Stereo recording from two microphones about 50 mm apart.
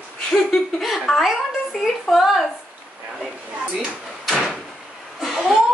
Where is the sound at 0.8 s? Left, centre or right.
Centre.